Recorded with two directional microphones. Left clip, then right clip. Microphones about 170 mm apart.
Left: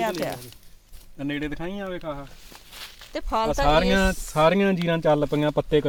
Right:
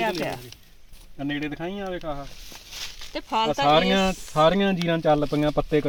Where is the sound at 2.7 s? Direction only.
15° right (ahead or behind).